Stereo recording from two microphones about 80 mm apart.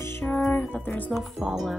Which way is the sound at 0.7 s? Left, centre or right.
Centre.